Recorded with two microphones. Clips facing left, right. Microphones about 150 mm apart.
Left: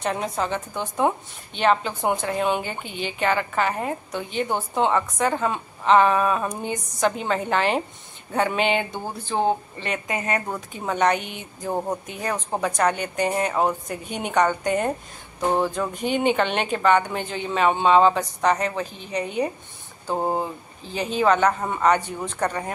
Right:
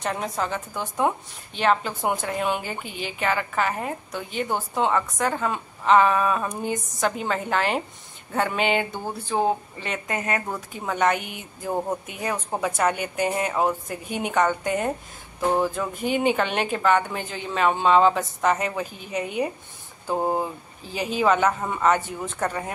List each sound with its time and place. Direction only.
0.0 s a woman's voice: centre (ahead or behind)
20.1 s speech: 15° left (ahead or behind)
20.3 s a woman's voice: 5° right (ahead or behind)